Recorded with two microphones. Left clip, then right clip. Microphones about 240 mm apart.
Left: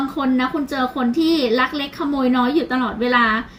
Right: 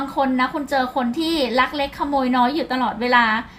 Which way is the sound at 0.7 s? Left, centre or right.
Right.